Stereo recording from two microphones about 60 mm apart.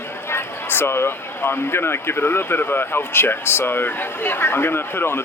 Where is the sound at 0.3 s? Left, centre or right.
Left.